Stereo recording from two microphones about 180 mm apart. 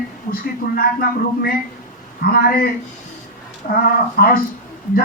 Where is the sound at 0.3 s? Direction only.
55° left (ahead or behind).